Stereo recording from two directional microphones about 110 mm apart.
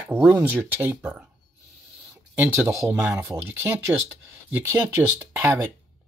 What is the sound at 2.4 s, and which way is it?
Speech, 25° right (ahead or behind).